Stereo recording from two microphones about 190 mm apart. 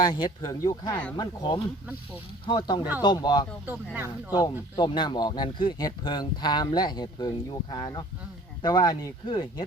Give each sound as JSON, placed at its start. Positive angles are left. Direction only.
{"t": 0.1, "sound": "speech", "side_deg": 20}
{"t": 3.7, "sound": "speech", "side_deg": -10}
{"t": 4.3, "sound": "speech", "side_deg": 20}